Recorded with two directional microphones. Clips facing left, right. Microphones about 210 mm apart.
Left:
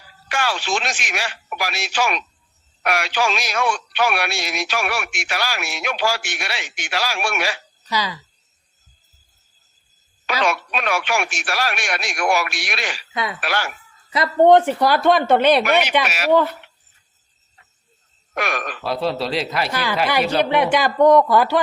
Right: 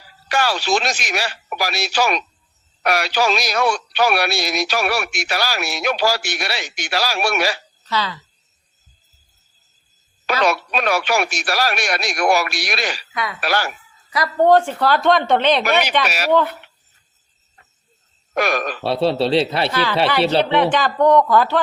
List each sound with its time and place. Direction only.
0.3 s speech: 40° right (ahead or behind)
7.9 s speech: 15° left (ahead or behind)
10.4 s speech: 40° right (ahead or behind)
14.1 s speech: 20° left (ahead or behind)
16.0 s speech: 40° right (ahead or behind)
18.3 s speech: 40° right (ahead or behind)
19.7 s speech: 10° left (ahead or behind)